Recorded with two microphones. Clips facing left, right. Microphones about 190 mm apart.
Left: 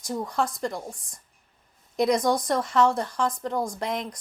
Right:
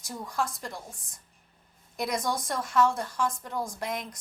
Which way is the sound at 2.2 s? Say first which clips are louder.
Left 7 dB; 50° left (ahead or behind).